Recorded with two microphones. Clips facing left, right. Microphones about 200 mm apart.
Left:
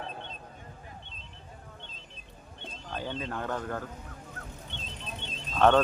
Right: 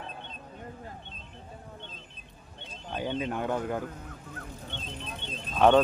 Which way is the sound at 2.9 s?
15° right (ahead or behind).